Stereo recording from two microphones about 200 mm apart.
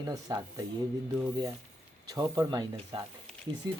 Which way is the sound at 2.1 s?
20° right (ahead or behind).